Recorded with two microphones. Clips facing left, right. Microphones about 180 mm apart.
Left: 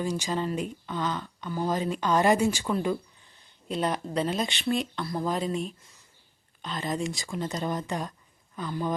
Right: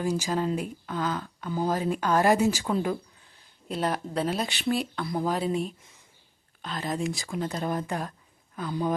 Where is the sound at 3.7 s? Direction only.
5° right (ahead or behind).